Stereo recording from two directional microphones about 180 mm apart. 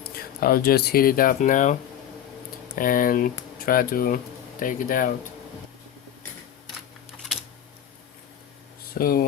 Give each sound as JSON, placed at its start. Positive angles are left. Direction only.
{"t": 0.0, "sound": "speech", "side_deg": 55}
{"t": 9.0, "sound": "speech", "side_deg": 55}